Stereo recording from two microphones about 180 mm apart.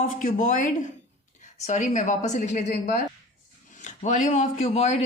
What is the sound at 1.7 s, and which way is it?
Speech, 45° left (ahead or behind).